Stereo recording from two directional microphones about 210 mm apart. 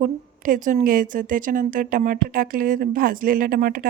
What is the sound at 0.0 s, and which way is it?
Speech, 40° right (ahead or behind).